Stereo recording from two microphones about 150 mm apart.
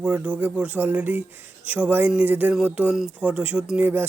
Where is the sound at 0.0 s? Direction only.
5° right (ahead or behind).